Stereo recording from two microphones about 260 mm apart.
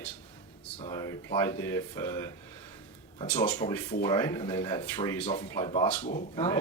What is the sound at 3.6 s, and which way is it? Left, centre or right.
Speech, centre.